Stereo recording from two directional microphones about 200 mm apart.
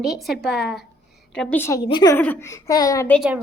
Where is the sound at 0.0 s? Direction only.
Centre (ahead or behind).